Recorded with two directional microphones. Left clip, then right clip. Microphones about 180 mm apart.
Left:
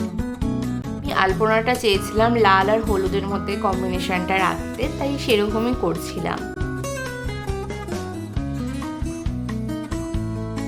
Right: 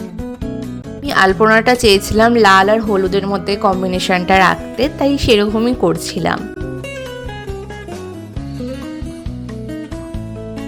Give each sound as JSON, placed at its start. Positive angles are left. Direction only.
{"t": 1.0, "sound": "a woman's voice", "side_deg": -35}